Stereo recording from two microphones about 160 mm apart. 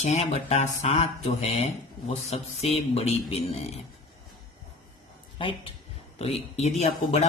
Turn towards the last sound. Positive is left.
turn(degrees=45)  # may be behind; listen again after turning